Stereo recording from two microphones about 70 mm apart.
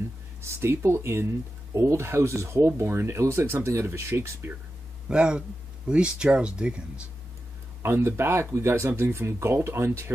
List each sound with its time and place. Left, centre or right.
0.4 s speech: right
5.0 s speech: centre
7.8 s speech: right